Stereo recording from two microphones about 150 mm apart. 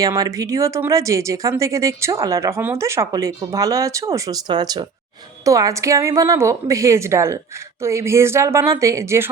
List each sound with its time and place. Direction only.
0.0 s speech: 20° right (ahead or behind)